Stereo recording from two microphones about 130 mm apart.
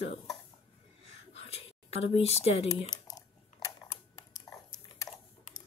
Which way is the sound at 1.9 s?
50° left (ahead or behind).